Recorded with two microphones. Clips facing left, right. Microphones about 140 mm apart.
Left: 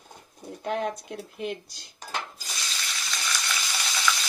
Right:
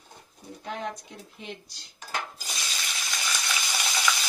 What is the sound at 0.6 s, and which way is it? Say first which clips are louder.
Speech: left 6 dB; 60° left (ahead or behind).